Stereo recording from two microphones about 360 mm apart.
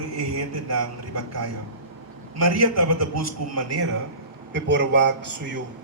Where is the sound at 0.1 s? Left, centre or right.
Right.